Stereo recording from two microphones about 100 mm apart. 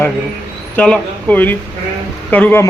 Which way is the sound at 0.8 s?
15° left (ahead or behind).